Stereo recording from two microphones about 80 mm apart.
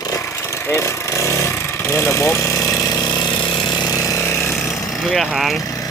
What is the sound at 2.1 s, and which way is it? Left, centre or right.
Ratchet, left.